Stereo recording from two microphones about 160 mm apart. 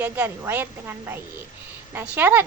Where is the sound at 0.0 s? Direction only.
10° right (ahead or behind).